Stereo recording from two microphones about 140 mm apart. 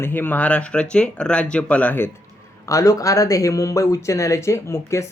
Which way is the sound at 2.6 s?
25° left (ahead or behind).